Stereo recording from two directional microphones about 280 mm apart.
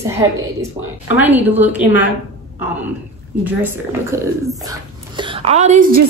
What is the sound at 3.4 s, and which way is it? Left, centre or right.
Speech, centre.